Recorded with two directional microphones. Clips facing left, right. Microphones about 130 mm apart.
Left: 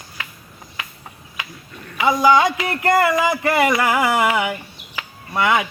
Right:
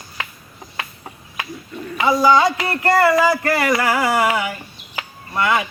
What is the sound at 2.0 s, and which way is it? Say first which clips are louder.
Speech: even; 15° left (ahead or behind).